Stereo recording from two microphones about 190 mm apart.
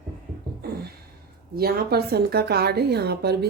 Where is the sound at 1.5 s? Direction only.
55° right (ahead or behind).